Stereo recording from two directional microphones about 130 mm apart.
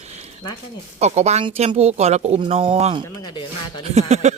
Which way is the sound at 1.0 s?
55° right (ahead or behind).